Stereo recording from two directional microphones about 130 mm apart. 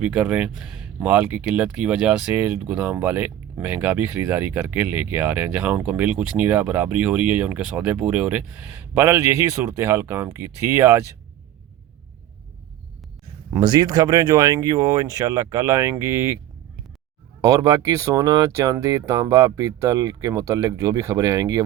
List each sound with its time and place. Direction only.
0.0 s speech: 10° right (ahead or behind)
13.6 s speech: 35° right (ahead or behind)
17.4 s speech: 25° right (ahead or behind)